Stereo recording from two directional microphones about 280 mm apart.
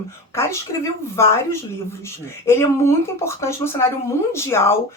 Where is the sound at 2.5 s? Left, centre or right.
Centre.